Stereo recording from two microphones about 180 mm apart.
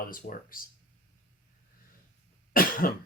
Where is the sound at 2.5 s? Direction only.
50° left (ahead or behind).